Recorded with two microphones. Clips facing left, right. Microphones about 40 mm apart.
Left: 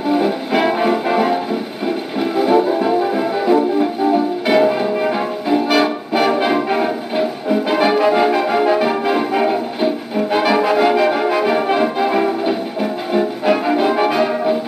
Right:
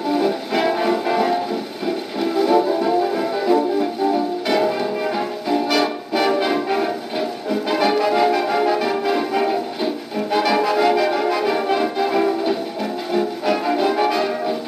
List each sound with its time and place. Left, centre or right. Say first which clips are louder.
0.1 s music: left 4 dB; centre